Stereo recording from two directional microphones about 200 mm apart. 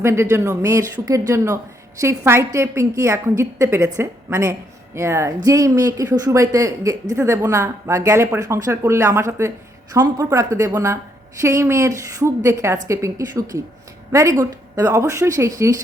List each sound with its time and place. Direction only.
0.0 s speech: 15° right (ahead or behind)